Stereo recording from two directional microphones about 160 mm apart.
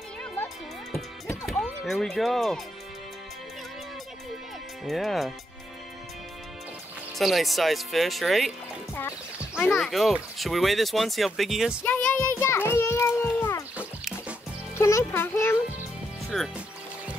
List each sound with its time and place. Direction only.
1.6 s speech: centre (ahead or behind)
4.8 s speech: centre (ahead or behind)
7.2 s speech: centre (ahead or behind)
9.6 s speech: centre (ahead or behind)
11.8 s music: 10° left (ahead or behind)
13.7 s music: 5° right (ahead or behind)
14.8 s music: 20° left (ahead or behind)
16.3 s speech: centre (ahead or behind)